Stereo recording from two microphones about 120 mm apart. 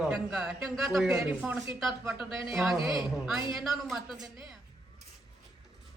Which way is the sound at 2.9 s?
40° left (ahead or behind).